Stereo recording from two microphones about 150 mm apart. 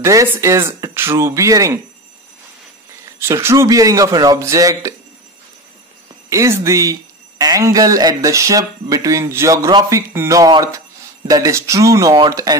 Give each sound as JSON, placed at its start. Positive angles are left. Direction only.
{"t": 0.0, "sound": "speech", "side_deg": -20}
{"t": 3.2, "sound": "speech", "side_deg": -15}
{"t": 6.3, "sound": "speech", "side_deg": -20}